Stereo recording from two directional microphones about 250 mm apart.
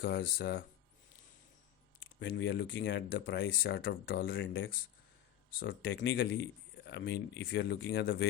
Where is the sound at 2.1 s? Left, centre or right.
Left.